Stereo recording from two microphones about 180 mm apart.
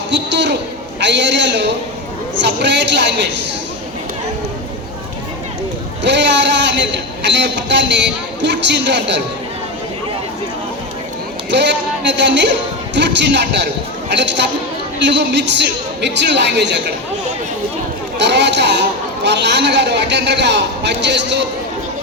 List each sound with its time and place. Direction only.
0.1 s a man's voice: 75° right (ahead or behind)
6.0 s a man's voice: 75° right (ahead or behind)
11.5 s a man's voice: 80° right
18.2 s a man's voice: 75° right (ahead or behind)